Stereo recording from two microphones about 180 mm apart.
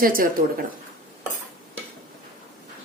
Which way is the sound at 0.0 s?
50° right (ahead or behind).